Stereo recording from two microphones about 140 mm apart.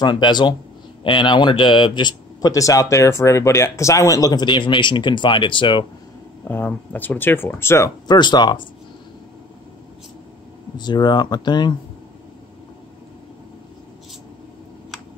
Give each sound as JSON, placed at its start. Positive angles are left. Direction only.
{"t": 0.0, "sound": "speech", "side_deg": 30}
{"t": 6.4, "sound": "speech", "side_deg": 15}
{"t": 8.1, "sound": "speech", "side_deg": 30}
{"t": 10.8, "sound": "speech", "side_deg": 30}